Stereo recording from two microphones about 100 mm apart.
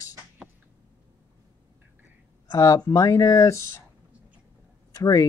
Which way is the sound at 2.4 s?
40° left (ahead or behind).